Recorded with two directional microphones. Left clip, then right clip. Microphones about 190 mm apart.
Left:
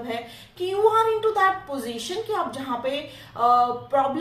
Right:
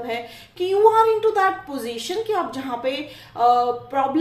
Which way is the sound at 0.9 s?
40° right (ahead or behind).